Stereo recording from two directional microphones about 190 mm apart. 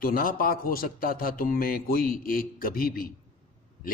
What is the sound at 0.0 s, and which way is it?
A man's voice, 50° left (ahead or behind).